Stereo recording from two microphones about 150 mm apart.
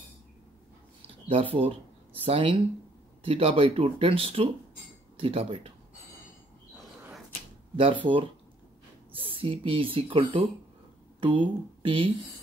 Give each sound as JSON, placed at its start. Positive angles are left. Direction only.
{"t": 1.3, "sound": "speech", "side_deg": -40}
{"t": 7.7, "sound": "speech", "side_deg": -35}